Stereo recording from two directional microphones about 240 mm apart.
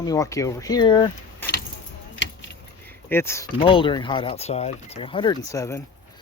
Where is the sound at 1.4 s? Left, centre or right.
Centre.